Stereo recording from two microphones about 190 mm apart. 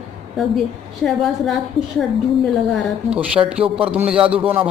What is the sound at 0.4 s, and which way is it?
A woman's voice, centre (ahead or behind).